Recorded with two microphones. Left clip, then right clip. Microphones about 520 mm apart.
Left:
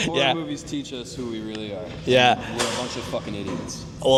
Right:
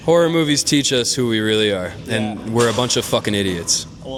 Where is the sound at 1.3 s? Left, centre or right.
Right.